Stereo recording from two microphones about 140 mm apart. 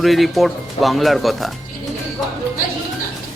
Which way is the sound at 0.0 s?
Centre (ahead or behind).